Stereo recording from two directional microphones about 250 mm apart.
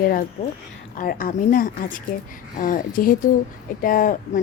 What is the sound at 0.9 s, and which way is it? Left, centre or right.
A woman's voice, left.